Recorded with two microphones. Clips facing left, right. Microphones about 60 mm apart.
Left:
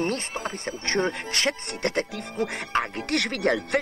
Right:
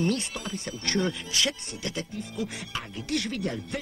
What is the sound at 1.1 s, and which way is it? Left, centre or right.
Speech, left.